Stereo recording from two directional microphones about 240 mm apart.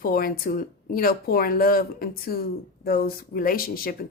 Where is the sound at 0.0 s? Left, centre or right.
Left.